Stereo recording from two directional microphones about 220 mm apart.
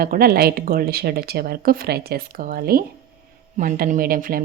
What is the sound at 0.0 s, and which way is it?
Speech, 40° right (ahead or behind).